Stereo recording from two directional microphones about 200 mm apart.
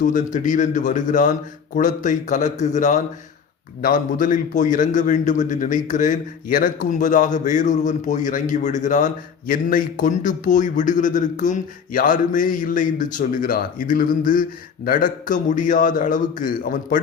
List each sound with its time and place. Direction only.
0.4 s a man's voice: 40° left (ahead or behind)